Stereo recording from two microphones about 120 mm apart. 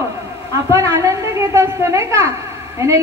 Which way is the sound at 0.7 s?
25° right (ahead or behind).